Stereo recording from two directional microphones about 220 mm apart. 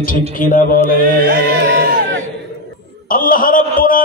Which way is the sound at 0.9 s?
40° right (ahead or behind).